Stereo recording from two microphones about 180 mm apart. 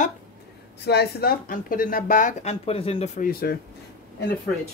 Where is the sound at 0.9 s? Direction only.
65° left (ahead or behind); by 3.3 s 40° left (ahead or behind).